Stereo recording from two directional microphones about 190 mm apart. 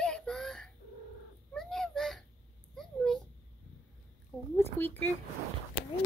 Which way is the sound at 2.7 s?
Centre (ahead or behind).